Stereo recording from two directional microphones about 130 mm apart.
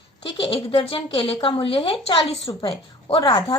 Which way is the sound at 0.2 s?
45° left (ahead or behind).